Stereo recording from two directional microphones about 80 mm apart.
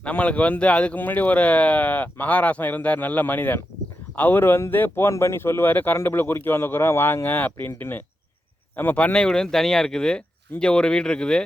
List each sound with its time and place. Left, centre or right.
0.0 s speech: centre